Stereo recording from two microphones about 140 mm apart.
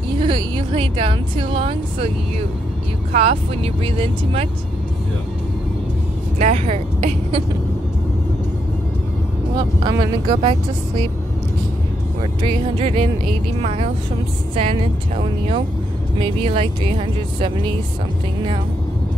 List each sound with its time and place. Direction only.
0.2 s a woman's voice: 35° right (ahead or behind)
3.1 s speech: 45° right (ahead or behind)
6.3 s speech: 50° right (ahead or behind)
9.6 s speech: 30° right (ahead or behind)
12.2 s speech: 35° right (ahead or behind)